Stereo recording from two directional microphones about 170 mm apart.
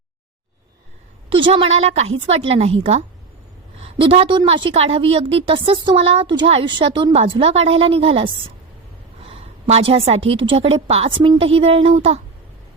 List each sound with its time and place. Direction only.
1.3 s a woman's voice: 30° right (ahead or behind)